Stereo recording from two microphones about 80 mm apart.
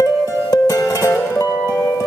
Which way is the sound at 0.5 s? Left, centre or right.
Left.